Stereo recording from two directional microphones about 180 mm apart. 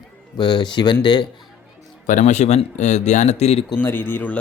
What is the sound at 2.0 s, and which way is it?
Speech, 45° left (ahead or behind).